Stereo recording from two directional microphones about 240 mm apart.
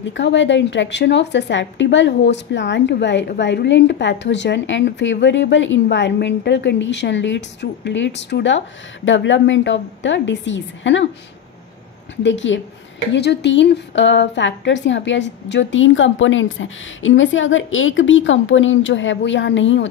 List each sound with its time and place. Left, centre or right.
0.0 s a woman's voice: left
12.2 s a woman's voice: left